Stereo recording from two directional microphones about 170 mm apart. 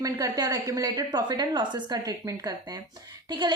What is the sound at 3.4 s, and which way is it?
Speech, 25° right (ahead or behind).